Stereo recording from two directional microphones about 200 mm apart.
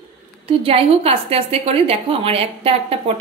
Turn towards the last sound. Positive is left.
turn(degrees=-30)  # may be behind; listen again after turning